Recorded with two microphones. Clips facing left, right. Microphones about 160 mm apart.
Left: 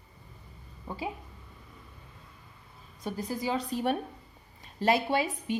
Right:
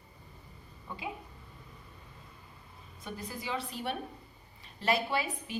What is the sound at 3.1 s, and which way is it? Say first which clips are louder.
A woman's voice: left 7 dB; 35° left (ahead or behind).